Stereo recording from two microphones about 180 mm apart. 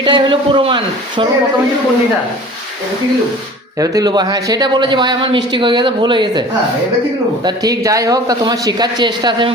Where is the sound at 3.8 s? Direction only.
20° right (ahead or behind).